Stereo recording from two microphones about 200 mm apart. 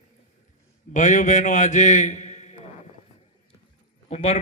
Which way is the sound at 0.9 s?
40° left (ahead or behind).